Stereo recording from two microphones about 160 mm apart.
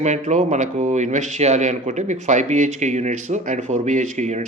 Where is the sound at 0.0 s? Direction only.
45° right (ahead or behind).